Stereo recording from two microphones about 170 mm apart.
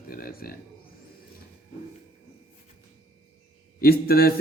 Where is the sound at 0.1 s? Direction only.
60° left (ahead or behind).